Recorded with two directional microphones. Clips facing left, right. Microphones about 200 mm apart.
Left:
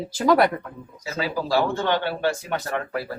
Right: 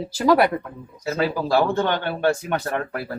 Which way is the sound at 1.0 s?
55° right (ahead or behind).